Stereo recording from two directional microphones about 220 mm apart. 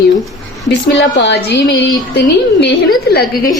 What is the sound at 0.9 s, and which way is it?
A woman's voice, 50° left (ahead or behind).